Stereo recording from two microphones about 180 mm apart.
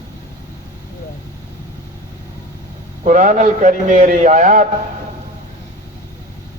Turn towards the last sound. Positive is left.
turn(degrees=-45)  # may be behind; listen again after turning